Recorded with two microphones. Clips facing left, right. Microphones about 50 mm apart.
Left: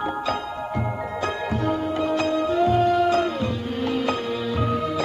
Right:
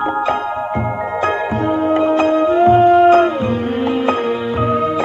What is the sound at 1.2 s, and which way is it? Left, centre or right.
Music, right.